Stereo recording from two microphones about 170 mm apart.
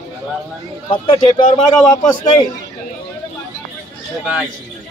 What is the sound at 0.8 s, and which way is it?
Speech, 30° left (ahead or behind).